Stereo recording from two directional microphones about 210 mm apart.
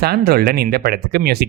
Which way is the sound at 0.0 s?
50° right (ahead or behind).